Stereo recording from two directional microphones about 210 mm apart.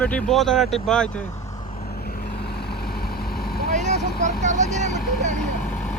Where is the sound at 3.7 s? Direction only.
35° right (ahead or behind).